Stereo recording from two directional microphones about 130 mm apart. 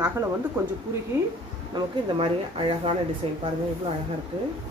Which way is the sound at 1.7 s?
45° right (ahead or behind).